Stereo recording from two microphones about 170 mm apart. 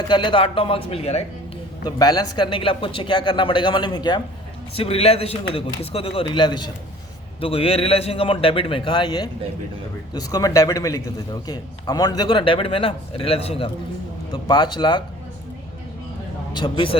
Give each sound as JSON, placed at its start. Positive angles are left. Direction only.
{"t": 0.1, "sound": "a man's voice", "side_deg": 30}
{"t": 1.8, "sound": "a man's voice", "side_deg": 25}
{"t": 4.8, "sound": "a man's voice", "side_deg": 35}
{"t": 16.5, "sound": "a man's voice", "side_deg": 25}